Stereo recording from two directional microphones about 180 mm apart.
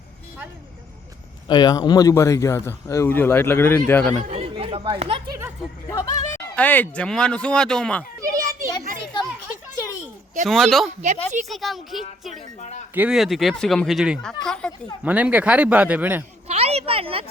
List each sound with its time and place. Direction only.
1.5 s speech: 25° left (ahead or behind)
4.3 s speech: 35° right (ahead or behind)
5.9 s speech: 15° left (ahead or behind)
8.2 s children playing: 15° right (ahead or behind)
10.4 s speech: centre (ahead or behind)
10.8 s speech: 40° right (ahead or behind)
11.4 s speech: centre (ahead or behind)
12.5 s speech: 40° left (ahead or behind)
12.9 s speech: 5° right (ahead or behind)
15.0 s speech: 10° right (ahead or behind)
16.5 s a woman's voice: 35° right (ahead or behind)